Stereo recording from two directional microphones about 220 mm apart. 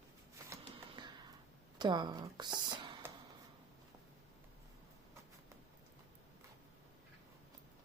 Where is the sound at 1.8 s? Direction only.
20° right (ahead or behind).